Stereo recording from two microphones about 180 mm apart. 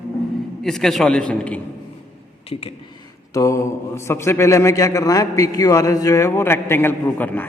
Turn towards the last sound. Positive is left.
turn(degrees=10)  # may be behind; listen again after turning